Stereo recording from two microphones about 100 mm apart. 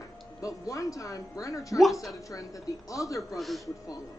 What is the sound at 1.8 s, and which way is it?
Speech, centre (ahead or behind).